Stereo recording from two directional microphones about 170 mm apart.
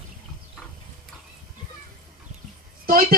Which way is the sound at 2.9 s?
60° right (ahead or behind).